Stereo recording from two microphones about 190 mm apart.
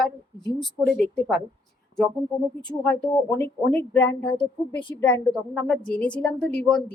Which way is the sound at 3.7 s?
5° left (ahead or behind).